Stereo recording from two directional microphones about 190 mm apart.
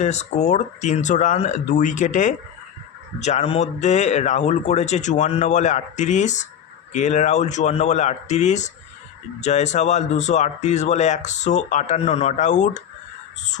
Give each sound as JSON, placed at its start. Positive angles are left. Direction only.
{"t": 0.0, "sound": "speech", "side_deg": 35}